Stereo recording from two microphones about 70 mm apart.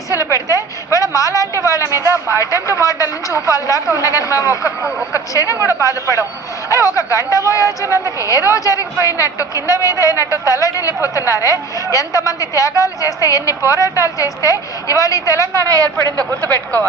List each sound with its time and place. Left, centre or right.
0.1 s a woman's voice: left
15.6 s a man's voice: right